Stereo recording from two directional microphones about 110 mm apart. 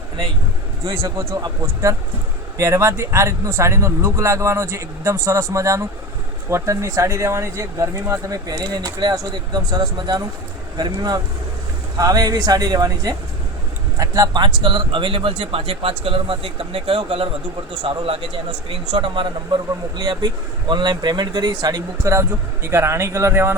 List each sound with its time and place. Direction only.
1.6 s speech: 25° right (ahead or behind); by 19.5 s 50° right (ahead or behind)
20.0 s speech: 40° right (ahead or behind)